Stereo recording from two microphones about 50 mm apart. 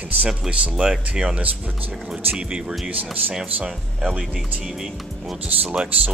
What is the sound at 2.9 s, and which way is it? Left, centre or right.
Speech, right.